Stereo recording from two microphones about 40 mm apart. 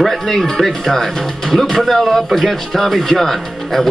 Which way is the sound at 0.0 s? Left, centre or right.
Centre.